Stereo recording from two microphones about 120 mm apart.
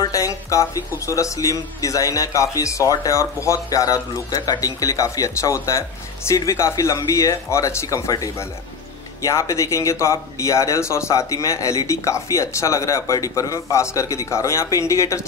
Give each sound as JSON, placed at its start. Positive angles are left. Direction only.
{"t": 0.0, "sound": "speech", "side_deg": 30}